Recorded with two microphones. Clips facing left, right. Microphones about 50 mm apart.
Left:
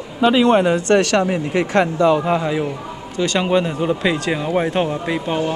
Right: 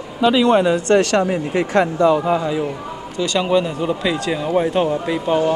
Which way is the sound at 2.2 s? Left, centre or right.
Left.